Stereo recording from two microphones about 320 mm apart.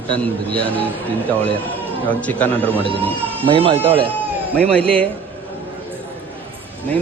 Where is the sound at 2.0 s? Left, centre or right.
Centre.